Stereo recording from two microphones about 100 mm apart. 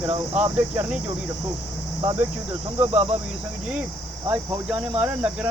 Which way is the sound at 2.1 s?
20° right (ahead or behind).